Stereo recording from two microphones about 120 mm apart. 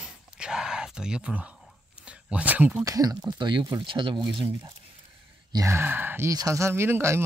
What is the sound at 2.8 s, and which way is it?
Speech, 30° right (ahead or behind).